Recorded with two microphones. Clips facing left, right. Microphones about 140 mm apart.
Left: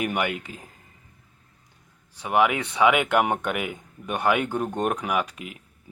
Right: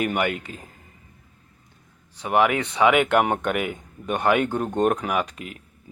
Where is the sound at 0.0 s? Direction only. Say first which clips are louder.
Right 2 dB; 10° left (ahead or behind).